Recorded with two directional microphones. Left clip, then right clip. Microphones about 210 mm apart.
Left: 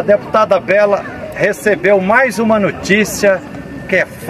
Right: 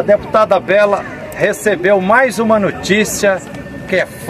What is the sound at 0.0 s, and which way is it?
Speech, 10° left (ahead or behind).